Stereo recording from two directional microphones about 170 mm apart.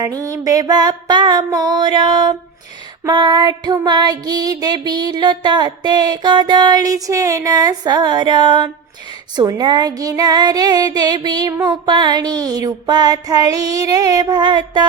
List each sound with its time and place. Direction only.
0.0 s music: 20° right (ahead or behind)